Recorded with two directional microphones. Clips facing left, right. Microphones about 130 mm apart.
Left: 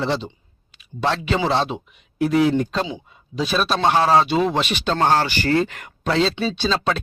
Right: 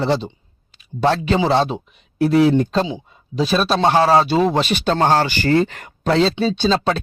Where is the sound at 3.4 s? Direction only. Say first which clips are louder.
Right 3 dB; 30° right (ahead or behind).